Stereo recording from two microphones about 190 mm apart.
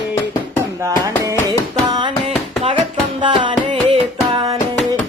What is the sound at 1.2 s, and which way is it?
Carnatic music, 20° right (ahead or behind).